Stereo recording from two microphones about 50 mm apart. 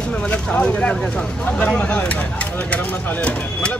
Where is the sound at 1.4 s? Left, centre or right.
Left.